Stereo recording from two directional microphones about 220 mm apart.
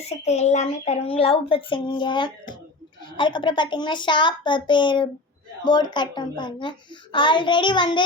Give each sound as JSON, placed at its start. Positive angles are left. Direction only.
{"t": 0.0, "sound": "a child's voice", "side_deg": 30}